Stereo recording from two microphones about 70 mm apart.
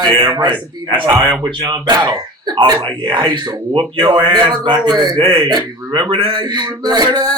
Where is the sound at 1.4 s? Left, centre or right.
Right.